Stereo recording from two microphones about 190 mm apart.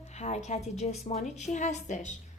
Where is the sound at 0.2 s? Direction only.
35° left (ahead or behind).